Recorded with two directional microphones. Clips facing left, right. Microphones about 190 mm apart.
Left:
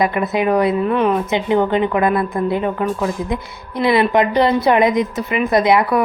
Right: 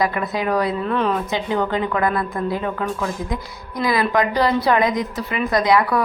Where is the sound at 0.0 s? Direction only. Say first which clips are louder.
Left 4 dB; 20° left (ahead or behind).